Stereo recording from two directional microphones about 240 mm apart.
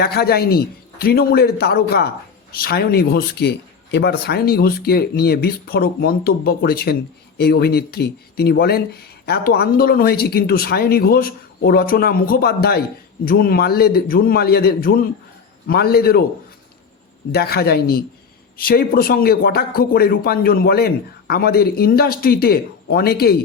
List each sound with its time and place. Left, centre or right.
0.0 s speech: left
17.3 s speech: left